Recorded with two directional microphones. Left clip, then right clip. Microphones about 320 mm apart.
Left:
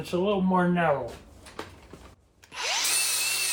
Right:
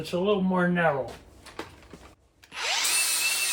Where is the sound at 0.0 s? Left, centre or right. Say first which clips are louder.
Right 1 dB; centre.